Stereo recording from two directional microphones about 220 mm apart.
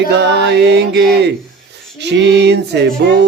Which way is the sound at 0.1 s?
50° right (ahead or behind).